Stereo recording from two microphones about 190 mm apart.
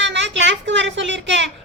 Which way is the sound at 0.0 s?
70° right (ahead or behind).